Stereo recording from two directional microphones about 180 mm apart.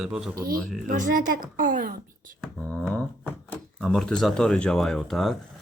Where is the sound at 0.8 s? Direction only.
50° right (ahead or behind).